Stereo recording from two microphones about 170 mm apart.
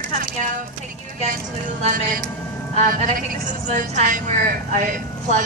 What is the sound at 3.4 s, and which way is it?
A woman's voice, 45° right (ahead or behind).